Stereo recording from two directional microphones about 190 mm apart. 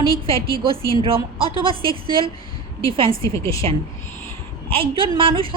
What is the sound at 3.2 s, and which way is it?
Speech, 15° left (ahead or behind).